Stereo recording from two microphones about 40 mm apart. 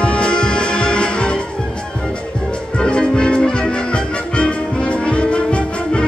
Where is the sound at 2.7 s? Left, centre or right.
Left.